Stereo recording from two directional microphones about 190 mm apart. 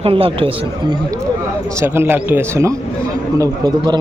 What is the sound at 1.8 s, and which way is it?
Speech, 10° right (ahead or behind).